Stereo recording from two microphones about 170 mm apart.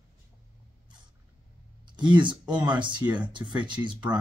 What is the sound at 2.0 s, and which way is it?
Speech, 25° right (ahead or behind).